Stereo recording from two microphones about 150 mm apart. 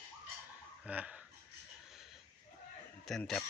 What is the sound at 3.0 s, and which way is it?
Speech, centre (ahead or behind).